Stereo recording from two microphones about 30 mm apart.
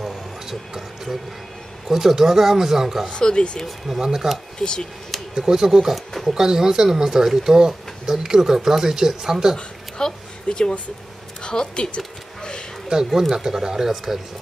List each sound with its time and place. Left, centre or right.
0.0 s a sound: centre
1.9 s speech: centre
3.1 s speech: left
3.6 s speech: centre
4.0 s speech: centre
4.6 s speech: left
5.3 s speech: centre
9.9 s a sound: left
11.4 s speech: left
12.9 s speech: right
13.3 s speech: centre